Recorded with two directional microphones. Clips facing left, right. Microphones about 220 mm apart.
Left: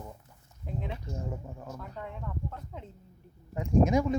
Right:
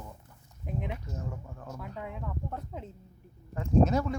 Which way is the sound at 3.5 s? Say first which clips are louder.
Left 1 dB; 15° left (ahead or behind).